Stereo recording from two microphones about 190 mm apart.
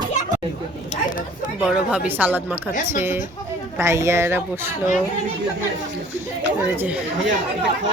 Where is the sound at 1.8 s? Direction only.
5° right (ahead or behind).